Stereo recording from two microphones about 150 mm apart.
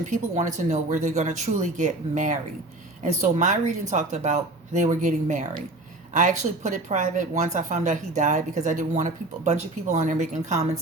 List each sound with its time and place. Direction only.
0.1 s speech: 55° right (ahead or behind)